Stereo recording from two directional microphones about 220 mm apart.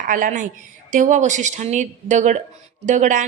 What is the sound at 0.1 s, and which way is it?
A woman's voice, 35° right (ahead or behind).